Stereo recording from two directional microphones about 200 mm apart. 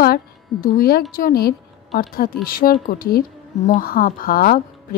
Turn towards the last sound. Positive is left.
turn(degrees=45)  # may be behind; listen again after turning